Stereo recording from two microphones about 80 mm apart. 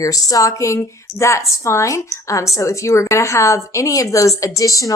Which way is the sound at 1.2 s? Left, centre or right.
Left.